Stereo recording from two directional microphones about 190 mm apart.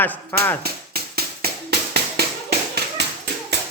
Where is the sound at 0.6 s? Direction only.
55° right (ahead or behind).